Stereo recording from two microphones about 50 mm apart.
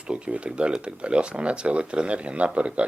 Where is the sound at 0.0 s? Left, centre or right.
Right.